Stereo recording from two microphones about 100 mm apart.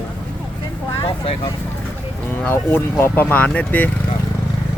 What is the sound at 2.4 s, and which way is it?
Speech, 20° left (ahead or behind).